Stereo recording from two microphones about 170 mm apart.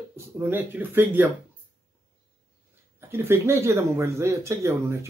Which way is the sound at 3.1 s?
15° right (ahead or behind).